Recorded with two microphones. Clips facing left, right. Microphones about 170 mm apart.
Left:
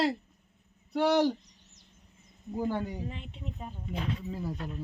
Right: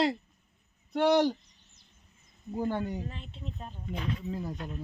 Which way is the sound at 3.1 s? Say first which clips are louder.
Left 1 dB; 15° left (ahead or behind).